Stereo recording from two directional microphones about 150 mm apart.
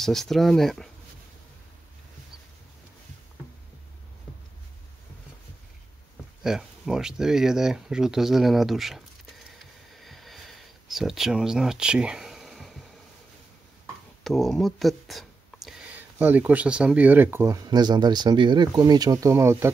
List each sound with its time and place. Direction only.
0.0 s speech: centre (ahead or behind)
6.4 s a sound: 5° right (ahead or behind)
14.2 s speech: centre (ahead or behind)
16.0 s speech: 10° right (ahead or behind)